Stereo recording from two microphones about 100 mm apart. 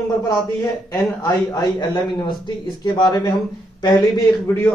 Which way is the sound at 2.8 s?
45° left (ahead or behind).